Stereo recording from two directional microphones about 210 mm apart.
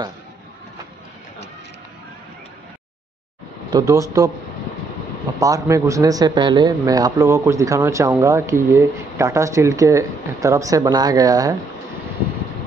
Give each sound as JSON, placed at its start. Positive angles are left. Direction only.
{"t": 3.7, "sound": "speech", "side_deg": -15}
{"t": 5.4, "sound": "speech", "side_deg": -15}